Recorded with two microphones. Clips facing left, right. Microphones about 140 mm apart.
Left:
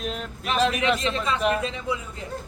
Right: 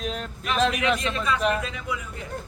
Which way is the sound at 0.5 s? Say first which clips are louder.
Even; centre (ahead or behind).